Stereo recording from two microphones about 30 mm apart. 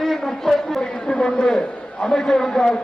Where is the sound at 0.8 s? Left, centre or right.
Left.